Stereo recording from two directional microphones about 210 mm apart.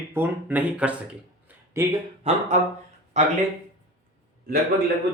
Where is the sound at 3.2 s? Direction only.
35° right (ahead or behind).